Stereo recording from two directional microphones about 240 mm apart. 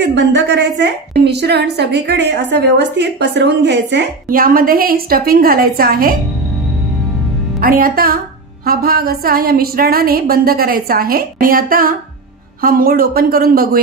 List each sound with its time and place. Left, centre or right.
0.0 s a woman's voice: right
7.6 s a woman's voice: right